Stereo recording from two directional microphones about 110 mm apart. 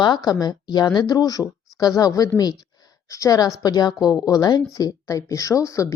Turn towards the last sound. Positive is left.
turn(degrees=30)  # may be behind; listen again after turning